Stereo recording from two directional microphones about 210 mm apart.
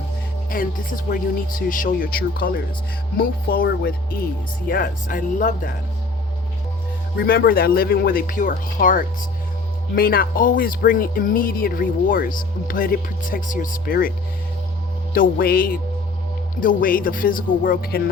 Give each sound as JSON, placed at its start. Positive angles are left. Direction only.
{"t": 0.5, "sound": "speech", "side_deg": 40}
{"t": 7.2, "sound": "speech", "side_deg": 45}
{"t": 15.1, "sound": "speech", "side_deg": 45}